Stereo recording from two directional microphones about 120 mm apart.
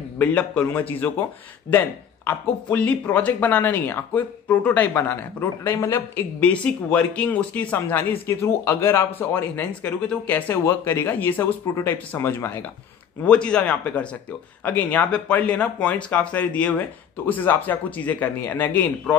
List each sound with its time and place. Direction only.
0.2 s speech: 10° left (ahead or behind)
6.4 s speech: 10° left (ahead or behind)
13.2 s speech: 10° left (ahead or behind)